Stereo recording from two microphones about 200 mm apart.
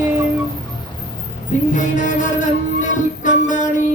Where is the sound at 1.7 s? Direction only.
40° left (ahead or behind).